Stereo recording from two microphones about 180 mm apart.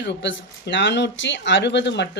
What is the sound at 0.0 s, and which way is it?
Speech, 85° left.